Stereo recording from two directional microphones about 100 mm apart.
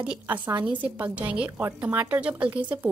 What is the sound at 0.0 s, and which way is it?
A woman's voice, 10° right (ahead or behind).